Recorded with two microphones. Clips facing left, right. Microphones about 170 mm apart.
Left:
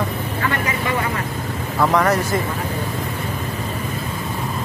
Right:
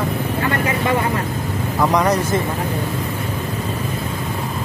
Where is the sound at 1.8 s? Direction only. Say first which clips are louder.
Even; 15° right (ahead or behind).